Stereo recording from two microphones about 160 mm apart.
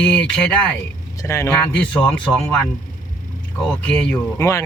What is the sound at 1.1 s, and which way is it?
Speech, 15° left (ahead or behind).